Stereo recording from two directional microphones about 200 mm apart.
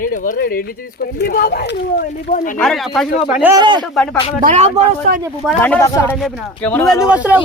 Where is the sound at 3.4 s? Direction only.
15° right (ahead or behind).